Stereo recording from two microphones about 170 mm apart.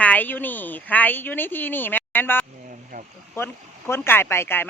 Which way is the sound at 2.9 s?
50° right (ahead or behind).